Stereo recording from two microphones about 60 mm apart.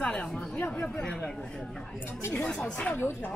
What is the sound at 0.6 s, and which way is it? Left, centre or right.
Speech, left.